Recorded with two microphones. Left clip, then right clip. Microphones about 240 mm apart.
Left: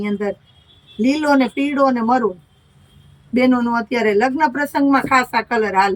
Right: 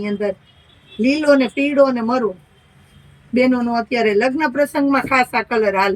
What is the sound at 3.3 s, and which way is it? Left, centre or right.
Speech, centre.